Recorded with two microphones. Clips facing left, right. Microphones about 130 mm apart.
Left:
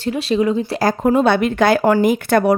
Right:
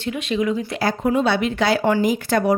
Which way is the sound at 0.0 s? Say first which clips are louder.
Left 5 dB; 35° left (ahead or behind).